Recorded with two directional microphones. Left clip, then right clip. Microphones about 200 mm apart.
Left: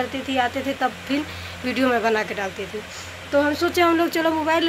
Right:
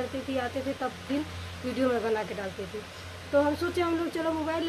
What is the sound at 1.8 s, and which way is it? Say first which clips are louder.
Speech: left 7 dB; 10° left (ahead or behind).